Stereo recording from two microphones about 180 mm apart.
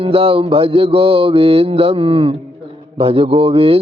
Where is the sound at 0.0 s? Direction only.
30° right (ahead or behind).